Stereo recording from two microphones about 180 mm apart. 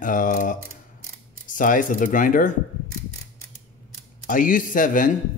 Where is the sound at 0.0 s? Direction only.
45° left (ahead or behind).